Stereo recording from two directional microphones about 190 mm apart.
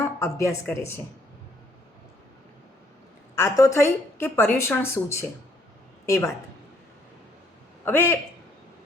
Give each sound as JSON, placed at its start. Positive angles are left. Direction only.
{"t": 0.2, "sound": "a woman's voice", "side_deg": 15}
{"t": 3.3, "sound": "a woman's voice", "side_deg": 15}
{"t": 7.9, "sound": "a woman's voice", "side_deg": 10}